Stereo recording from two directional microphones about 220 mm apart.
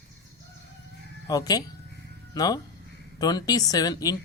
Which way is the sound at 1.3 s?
15° left (ahead or behind).